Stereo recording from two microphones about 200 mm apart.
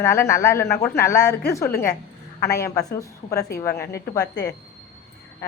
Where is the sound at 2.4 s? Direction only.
15° left (ahead or behind).